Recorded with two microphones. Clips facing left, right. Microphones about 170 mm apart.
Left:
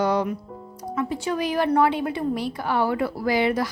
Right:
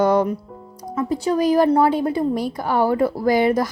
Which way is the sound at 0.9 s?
35° right (ahead or behind).